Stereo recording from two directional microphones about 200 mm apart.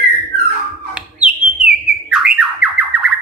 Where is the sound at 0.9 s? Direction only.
5° right (ahead or behind).